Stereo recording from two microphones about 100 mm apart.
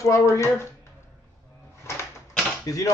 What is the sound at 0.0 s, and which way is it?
Speech, 30° left (ahead or behind).